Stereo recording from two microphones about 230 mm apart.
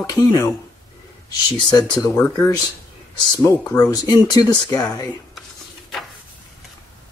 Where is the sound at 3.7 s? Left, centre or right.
Centre.